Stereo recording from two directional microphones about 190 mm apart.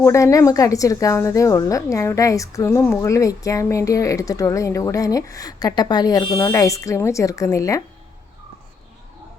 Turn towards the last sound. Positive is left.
turn(degrees=15)  # may be behind; listen again after turning